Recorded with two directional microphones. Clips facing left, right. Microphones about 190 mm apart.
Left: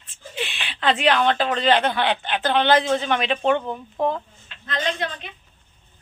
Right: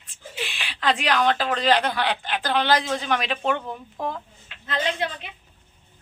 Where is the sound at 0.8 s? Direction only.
25° left (ahead or behind).